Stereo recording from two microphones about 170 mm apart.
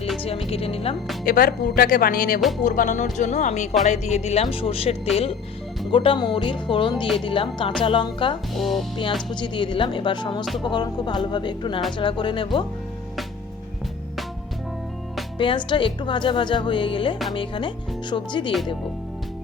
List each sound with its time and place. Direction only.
0.2 s music: 35° left (ahead or behind)
1.2 s speech: 55° left (ahead or behind)
3.8 s music: 40° left (ahead or behind)
5.9 s a woman's voice: 30° left (ahead or behind)
7.2 s music: 30° left (ahead or behind)
7.8 s a woman's voice: 30° left (ahead or behind)
8.5 s speech: centre (ahead or behind)
9.3 s a woman's voice: 25° left (ahead or behind)
15.4 s a woman's voice: 30° left (ahead or behind)